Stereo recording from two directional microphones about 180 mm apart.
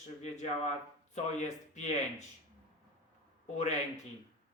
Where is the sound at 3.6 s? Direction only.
40° left (ahead or behind).